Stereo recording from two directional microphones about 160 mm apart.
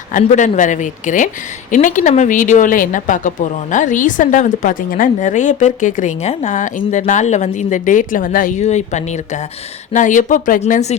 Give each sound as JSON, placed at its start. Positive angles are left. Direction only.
{"t": 0.1, "sound": "a woman's voice", "side_deg": 50}